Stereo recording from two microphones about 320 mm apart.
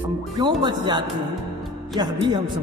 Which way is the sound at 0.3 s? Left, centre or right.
Centre.